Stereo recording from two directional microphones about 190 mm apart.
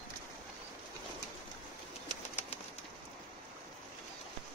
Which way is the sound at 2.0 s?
35° left (ahead or behind).